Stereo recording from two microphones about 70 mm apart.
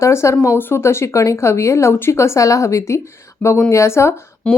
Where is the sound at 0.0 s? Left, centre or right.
Left.